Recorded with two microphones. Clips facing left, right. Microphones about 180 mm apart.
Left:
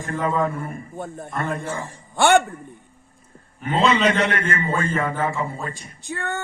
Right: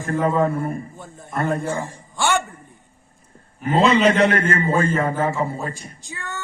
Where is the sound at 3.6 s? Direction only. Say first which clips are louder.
Right 3 dB; 35° right (ahead or behind).